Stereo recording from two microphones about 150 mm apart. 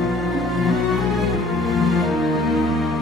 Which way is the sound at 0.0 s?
Centre (ahead or behind).